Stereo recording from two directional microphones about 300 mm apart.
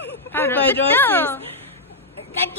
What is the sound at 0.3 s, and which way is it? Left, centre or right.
A woman's voice, centre.